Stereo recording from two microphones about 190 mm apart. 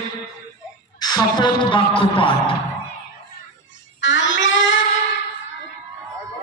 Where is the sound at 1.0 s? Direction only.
20° left (ahead or behind).